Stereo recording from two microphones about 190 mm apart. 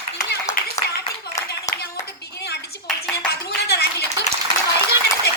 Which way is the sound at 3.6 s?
55° left (ahead or behind).